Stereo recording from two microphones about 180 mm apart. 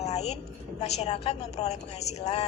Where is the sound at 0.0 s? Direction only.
35° left (ahead or behind).